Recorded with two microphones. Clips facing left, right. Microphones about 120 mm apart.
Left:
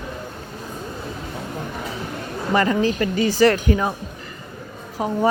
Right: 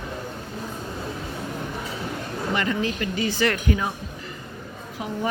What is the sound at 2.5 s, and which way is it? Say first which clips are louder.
Speech: left 8 dB; 35° left (ahead or behind).